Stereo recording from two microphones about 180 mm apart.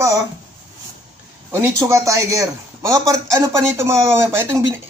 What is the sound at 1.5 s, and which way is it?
A man's voice, 15° right (ahead or behind).